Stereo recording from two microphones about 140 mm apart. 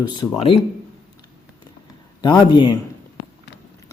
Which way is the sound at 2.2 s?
30° left (ahead or behind).